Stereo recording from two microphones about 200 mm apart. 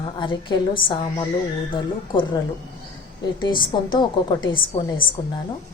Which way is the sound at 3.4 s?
25° left (ahead or behind).